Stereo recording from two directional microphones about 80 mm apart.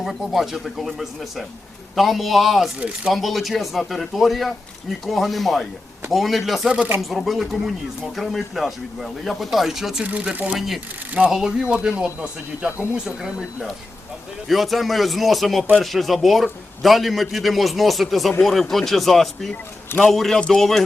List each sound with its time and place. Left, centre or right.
0.0 s speech: centre
10.1 s speech: centre
10.5 s speech: centre
14.4 s speech: centre